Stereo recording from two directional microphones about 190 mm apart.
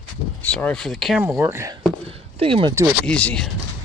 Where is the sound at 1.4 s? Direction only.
15° right (ahead or behind).